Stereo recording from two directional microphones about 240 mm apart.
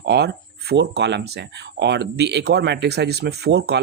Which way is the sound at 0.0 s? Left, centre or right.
Right.